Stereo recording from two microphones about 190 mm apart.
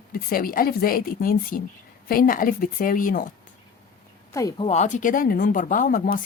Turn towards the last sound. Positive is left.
turn(degrees=45)  # may be behind; listen again after turning